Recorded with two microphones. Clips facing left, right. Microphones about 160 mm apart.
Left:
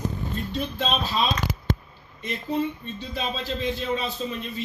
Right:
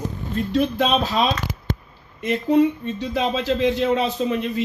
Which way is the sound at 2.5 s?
85° right.